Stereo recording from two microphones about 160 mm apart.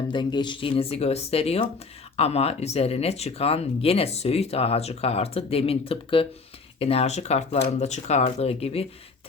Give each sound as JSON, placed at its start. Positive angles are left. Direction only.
{"t": 0.1, "sound": "speech", "side_deg": 30}